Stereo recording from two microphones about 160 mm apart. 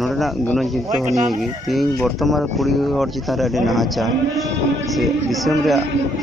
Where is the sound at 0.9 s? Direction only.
45° right (ahead or behind).